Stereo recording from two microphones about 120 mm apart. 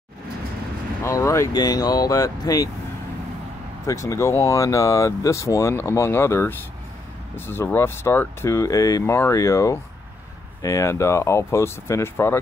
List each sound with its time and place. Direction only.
1.0 s speech: 25° left (ahead or behind)
3.8 s speech: 25° left (ahead or behind)